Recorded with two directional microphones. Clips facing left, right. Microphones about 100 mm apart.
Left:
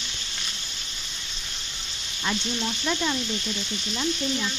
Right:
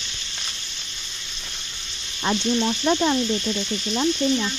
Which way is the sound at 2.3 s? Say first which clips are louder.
Right 7 dB; 30° right (ahead or behind).